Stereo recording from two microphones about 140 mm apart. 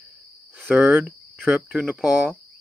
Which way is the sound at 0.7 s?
5° right (ahead or behind).